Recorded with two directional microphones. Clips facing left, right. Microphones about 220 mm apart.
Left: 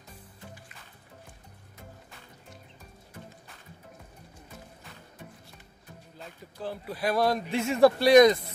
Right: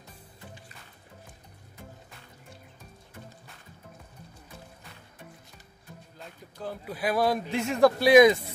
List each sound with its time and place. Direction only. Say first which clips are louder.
6.1 s speech: left 2 dB; centre (ahead or behind)